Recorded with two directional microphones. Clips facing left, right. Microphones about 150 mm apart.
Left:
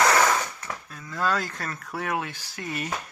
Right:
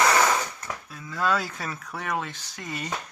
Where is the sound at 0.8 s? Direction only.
Centre (ahead or behind).